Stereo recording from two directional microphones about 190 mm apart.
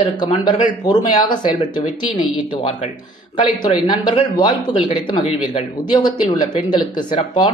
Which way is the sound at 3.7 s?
25° left (ahead or behind).